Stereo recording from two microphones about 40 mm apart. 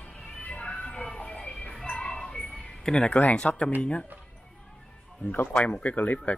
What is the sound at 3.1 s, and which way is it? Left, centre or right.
Speech, left.